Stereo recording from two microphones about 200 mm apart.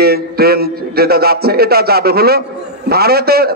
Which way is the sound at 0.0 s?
50° right (ahead or behind).